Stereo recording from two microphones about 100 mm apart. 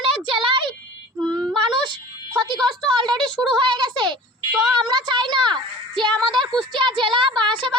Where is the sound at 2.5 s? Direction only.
50° right (ahead or behind).